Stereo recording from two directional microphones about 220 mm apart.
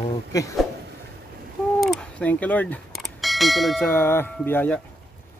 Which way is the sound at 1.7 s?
Centre (ahead or behind).